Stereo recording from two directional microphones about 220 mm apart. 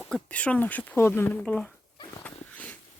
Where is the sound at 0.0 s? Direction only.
5° left (ahead or behind).